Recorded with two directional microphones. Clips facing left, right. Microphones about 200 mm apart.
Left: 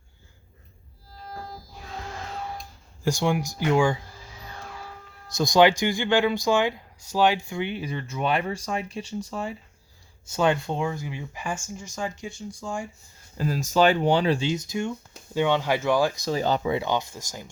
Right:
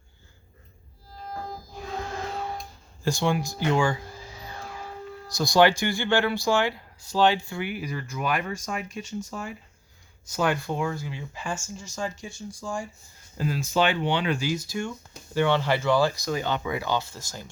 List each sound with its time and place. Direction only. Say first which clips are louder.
3.0 s speech: left 1 dB; 10° left (ahead or behind)
5.3 s speech: left 1 dB; 20° left (ahead or behind)
7.6 s speech: left 2 dB; 25° left (ahead or behind)
13.5 s speech: left 4 dB; 40° left (ahead or behind)
14.3 s speech: left 2 dB; 25° left (ahead or behind)
16.2 s speech: left 4 dB; 35° left (ahead or behind); by 17.5 s 15° left (ahead or behind)